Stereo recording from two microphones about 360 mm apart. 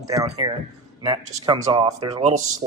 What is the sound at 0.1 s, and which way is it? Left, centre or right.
A man's voice, centre.